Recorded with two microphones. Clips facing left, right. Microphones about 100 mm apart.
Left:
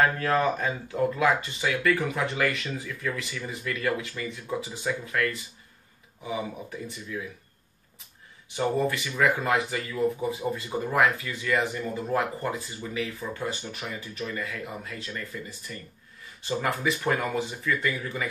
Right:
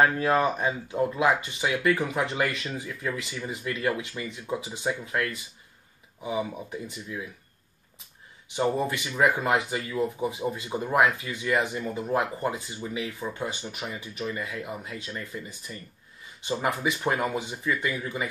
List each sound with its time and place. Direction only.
0.0 s speech: 20° right (ahead or behind)
8.5 s speech: 20° right (ahead or behind)